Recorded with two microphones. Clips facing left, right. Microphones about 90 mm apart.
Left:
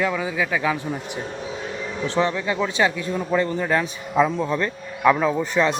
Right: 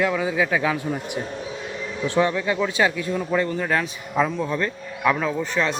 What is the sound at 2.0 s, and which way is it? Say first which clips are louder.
Speech: right 1 dB; 10° right (ahead or behind).